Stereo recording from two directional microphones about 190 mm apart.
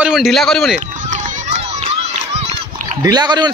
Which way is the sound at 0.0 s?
Centre (ahead or behind).